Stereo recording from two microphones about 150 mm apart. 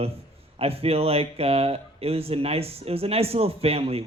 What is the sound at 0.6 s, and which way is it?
Speech, 40° right (ahead or behind).